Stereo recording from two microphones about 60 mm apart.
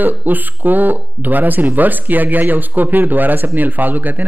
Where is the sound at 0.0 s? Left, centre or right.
Right.